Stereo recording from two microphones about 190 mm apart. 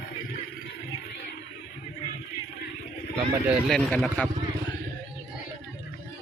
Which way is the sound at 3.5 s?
5° left (ahead or behind).